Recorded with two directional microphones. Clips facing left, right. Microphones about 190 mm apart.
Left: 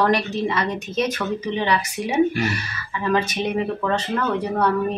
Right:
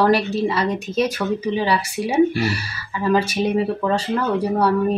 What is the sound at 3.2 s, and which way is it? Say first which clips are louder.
Speech: right 3 dB; 10° right (ahead or behind).